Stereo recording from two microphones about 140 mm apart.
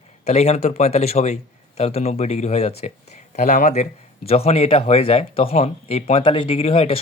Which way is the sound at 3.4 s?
65° left (ahead or behind).